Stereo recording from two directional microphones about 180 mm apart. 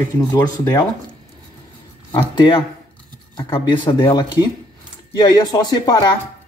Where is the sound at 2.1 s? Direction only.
25° left (ahead or behind).